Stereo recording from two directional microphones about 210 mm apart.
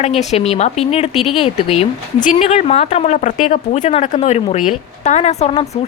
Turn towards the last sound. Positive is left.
turn(degrees=30)  # may be behind; listen again after turning